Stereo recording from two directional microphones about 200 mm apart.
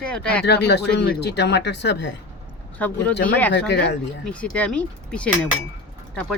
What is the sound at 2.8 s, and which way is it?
Speech, 10° left (ahead or behind).